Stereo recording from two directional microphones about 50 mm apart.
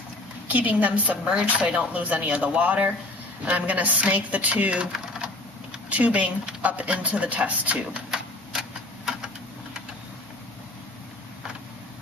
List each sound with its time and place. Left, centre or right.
0.5 s a woman's voice: right
5.9 s speech: right
8.1 s typewriter: centre